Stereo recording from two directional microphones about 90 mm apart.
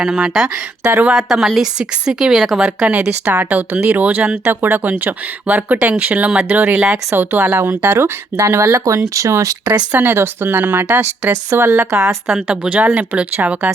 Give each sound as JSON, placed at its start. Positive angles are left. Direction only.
{"t": 0.0, "sound": "speech", "side_deg": -5}
{"t": 0.9, "sound": "speech", "side_deg": -25}
{"t": 1.1, "sound": "speech", "side_deg": -5}
{"t": 3.0, "sound": "speech", "side_deg": -20}
{"t": 9.6, "sound": "speech", "side_deg": -20}
{"t": 12.5, "sound": "speech", "side_deg": -15}